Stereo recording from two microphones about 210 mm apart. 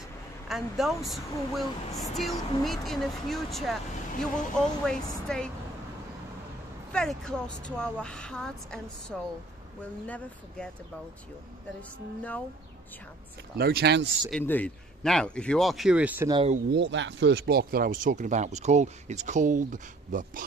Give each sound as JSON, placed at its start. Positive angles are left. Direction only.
{"t": 0.5, "sound": "speech", "side_deg": 0}
{"t": 6.9, "sound": "speech", "side_deg": 5}
{"t": 12.2, "sound": "speech", "side_deg": 5}
{"t": 13.6, "sound": "speech", "side_deg": -50}
{"t": 14.3, "sound": "speech", "side_deg": 10}
{"t": 16.3, "sound": "speech", "side_deg": -25}
{"t": 16.7, "sound": "speech", "side_deg": -60}